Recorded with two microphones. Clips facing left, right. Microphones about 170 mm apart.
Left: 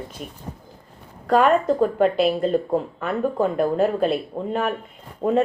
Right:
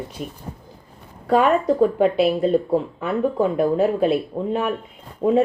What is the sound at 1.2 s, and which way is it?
Speech, 5° right (ahead or behind).